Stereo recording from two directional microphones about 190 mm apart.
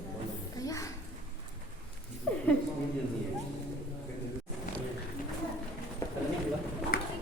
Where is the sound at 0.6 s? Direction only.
15° left (ahead or behind).